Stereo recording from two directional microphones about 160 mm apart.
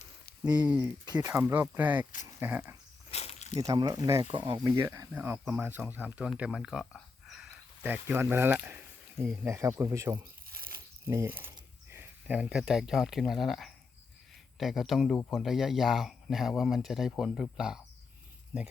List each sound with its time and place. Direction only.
1.0 s speech: 25° right (ahead or behind)
1.3 s speech: 15° right (ahead or behind)
3.1 s snake: 40° left (ahead or behind)
3.7 s speech: 20° right (ahead or behind)
10.7 s a sound: 15° right (ahead or behind)
11.9 s speech: 10° right (ahead or behind)